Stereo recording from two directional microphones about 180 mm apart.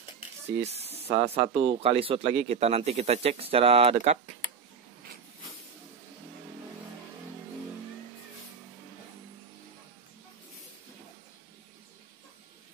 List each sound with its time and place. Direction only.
0.6 s speech: 35° right (ahead or behind)